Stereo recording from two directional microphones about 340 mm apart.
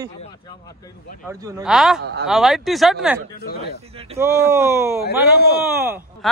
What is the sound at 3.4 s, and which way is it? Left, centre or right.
Speech, left.